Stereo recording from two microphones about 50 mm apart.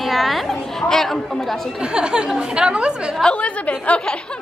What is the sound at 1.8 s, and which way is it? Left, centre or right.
Speech, centre.